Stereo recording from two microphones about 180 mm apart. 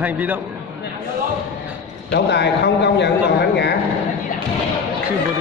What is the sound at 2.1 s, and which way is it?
A man's voice, 70° left (ahead or behind).